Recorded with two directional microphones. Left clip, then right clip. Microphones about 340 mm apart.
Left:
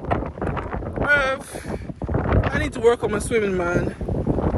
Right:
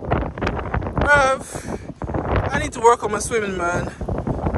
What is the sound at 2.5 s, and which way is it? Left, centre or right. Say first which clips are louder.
Speech: right 4 dB; centre.